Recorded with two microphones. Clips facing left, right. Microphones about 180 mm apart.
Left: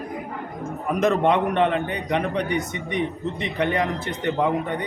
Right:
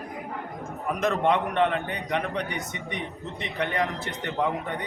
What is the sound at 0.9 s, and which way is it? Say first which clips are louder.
A man's voice: left 5 dB; 20° left (ahead or behind).